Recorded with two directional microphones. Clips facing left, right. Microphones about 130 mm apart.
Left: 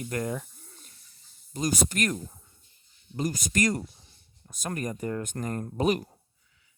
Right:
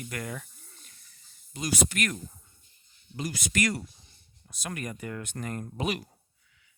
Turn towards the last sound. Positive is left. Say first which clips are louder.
# left 6 dB
turn(degrees=40)  # may be behind; listen again after turning